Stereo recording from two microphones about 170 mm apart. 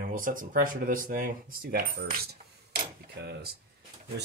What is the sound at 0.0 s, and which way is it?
Speech, 50° right (ahead or behind).